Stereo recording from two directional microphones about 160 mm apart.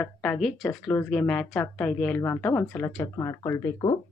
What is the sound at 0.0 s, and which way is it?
A woman's voice, 5° left (ahead or behind).